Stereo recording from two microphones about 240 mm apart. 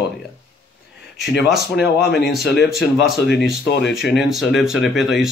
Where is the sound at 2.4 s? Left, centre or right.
Left.